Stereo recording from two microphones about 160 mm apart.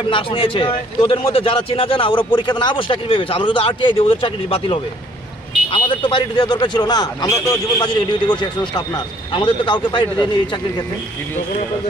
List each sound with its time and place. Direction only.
0.1 s a man's voice: 35° left (ahead or behind)